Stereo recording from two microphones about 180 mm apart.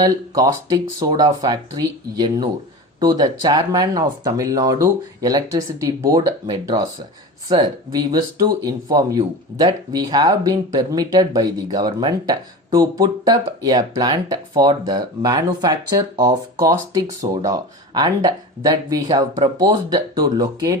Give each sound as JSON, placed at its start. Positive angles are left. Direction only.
{"t": 0.0, "sound": "speech", "side_deg": -20}